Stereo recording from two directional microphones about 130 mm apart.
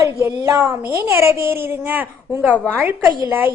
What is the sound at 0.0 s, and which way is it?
A child's voice, 20° right (ahead or behind).